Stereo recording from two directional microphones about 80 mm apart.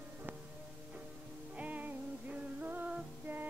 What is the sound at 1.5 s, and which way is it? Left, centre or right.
Music, centre.